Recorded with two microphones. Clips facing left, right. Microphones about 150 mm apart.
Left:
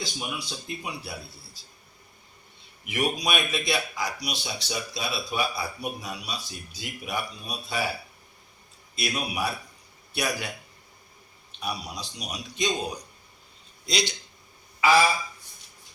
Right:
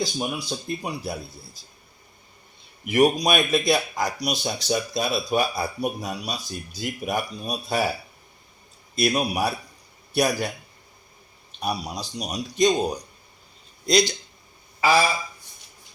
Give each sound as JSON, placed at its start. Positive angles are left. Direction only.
{"t": 0.0, "sound": "speech", "side_deg": -40}
{"t": 2.8, "sound": "a man's voice", "side_deg": -40}
{"t": 9.0, "sound": "speech", "side_deg": -40}
{"t": 11.6, "sound": "speech", "side_deg": -40}